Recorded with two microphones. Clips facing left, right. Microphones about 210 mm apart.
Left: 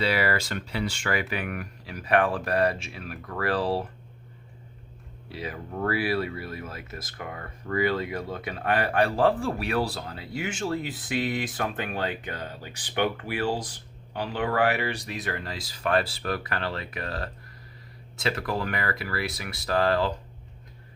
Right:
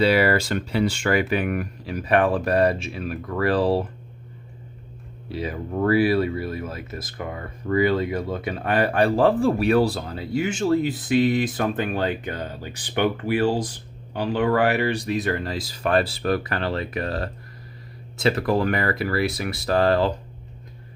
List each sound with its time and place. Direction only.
0.0 s speech: 30° right (ahead or behind)
5.3 s speech: 25° right (ahead or behind)
10.3 s speech: 40° right (ahead or behind)